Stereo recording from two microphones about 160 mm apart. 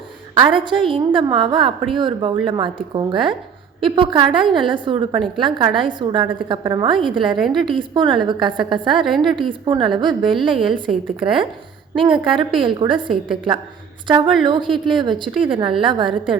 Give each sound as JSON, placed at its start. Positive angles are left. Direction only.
{"t": 0.5, "sound": "a woman's voice", "side_deg": -30}
{"t": 7.3, "sound": "a woman's voice", "side_deg": 0}
{"t": 7.7, "sound": "a woman's voice", "side_deg": -30}
{"t": 9.0, "sound": "a woman's voice", "side_deg": 0}
{"t": 9.3, "sound": "a woman's voice", "side_deg": -30}
{"t": 13.2, "sound": "a woman's voice", "side_deg": 0}
{"t": 14.1, "sound": "a woman's voice", "side_deg": -30}